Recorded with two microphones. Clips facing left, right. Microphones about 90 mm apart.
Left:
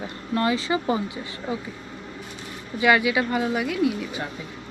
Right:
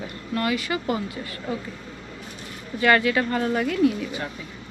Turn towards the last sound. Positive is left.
turn(degrees=5)  # may be behind; listen again after turning